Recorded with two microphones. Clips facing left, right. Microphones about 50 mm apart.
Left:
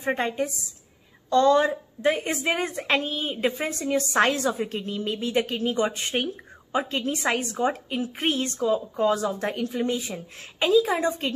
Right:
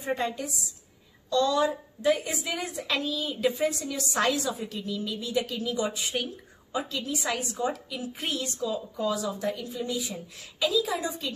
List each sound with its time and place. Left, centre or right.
0.0 s a woman's voice: left